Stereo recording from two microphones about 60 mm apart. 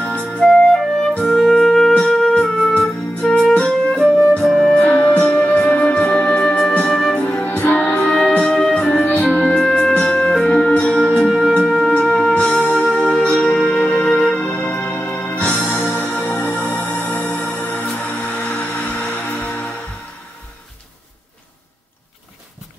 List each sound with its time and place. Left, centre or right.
0.0 s music: left
0.4 s music: centre
4.7 s music: left
7.4 s music: left